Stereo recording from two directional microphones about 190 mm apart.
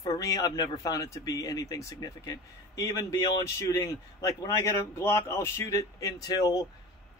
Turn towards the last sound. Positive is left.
turn(degrees=20)  # may be behind; listen again after turning